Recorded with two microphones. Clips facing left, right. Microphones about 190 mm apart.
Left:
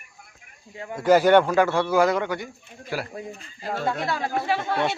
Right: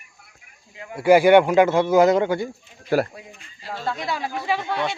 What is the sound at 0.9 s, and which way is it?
A man's voice, 10° right (ahead or behind).